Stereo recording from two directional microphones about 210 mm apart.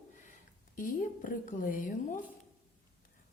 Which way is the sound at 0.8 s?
40° left (ahead or behind).